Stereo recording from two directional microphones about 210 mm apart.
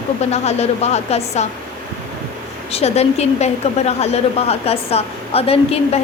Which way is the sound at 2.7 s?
30° left (ahead or behind).